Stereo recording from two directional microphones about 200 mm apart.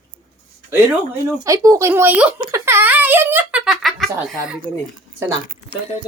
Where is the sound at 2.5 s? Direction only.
10° right (ahead or behind).